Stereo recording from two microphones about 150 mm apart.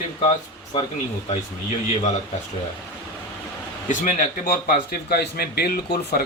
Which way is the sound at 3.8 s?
60° left (ahead or behind).